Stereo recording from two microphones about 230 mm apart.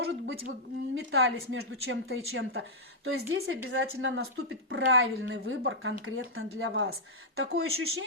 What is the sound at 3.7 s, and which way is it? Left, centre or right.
Speech, right.